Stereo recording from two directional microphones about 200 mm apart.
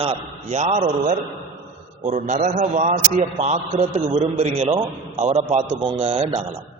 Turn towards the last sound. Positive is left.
turn(degrees=-30)  # may be behind; listen again after turning